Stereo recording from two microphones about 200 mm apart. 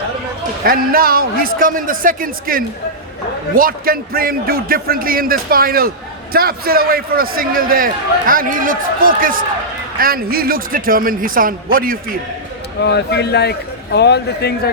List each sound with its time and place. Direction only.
0.6 s a man's voice: 45° right (ahead or behind)
12.8 s a man's voice: 55° left (ahead or behind)